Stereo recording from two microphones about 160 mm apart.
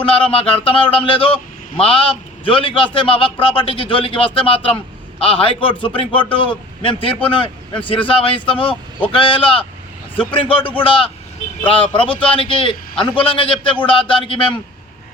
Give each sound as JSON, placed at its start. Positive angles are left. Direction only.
{"t": 0.0, "sound": "a man's voice", "side_deg": 35}